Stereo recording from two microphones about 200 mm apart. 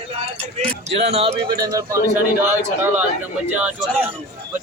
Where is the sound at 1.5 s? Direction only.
20° right (ahead or behind).